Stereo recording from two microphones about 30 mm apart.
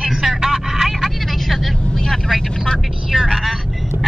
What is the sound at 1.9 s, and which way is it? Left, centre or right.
Speech, centre.